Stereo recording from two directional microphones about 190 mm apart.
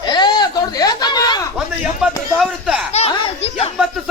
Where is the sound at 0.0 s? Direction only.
20° left (ahead or behind).